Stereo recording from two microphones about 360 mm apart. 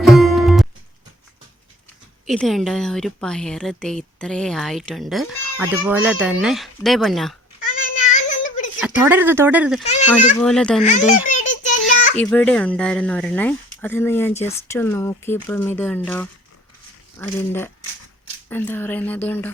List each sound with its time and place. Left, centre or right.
0.0 s music: centre
2.2 s speech: centre
7.6 s child singing: left
8.4 s a sound: left
8.8 s speech: centre
9.8 s a child's voice: centre
10.4 s speech: centre
10.8 s a child's voice: centre
11.9 s a sound: left
12.2 s speech: centre